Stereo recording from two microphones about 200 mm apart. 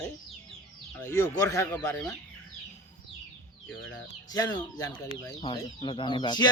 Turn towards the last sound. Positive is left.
turn(degrees=20)  # may be behind; listen again after turning